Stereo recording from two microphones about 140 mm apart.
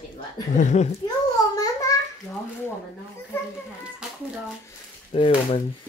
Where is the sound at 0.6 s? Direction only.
60° left (ahead or behind).